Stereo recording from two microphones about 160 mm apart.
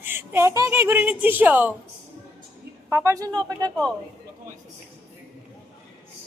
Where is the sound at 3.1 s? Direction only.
20° right (ahead or behind).